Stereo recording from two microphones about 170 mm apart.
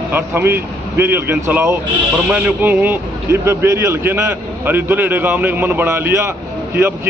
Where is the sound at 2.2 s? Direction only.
5° right (ahead or behind).